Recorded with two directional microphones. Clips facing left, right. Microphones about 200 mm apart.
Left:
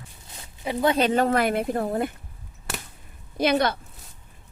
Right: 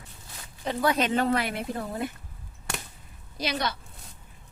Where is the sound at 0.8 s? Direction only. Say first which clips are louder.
Left 4 dB; 30° left (ahead or behind); by 2.1 s 55° left (ahead or behind).